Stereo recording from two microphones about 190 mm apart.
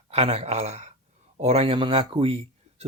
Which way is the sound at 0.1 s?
30° right (ahead or behind).